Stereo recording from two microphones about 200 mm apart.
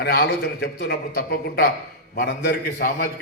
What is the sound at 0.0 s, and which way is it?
A man's voice, 50° left (ahead or behind).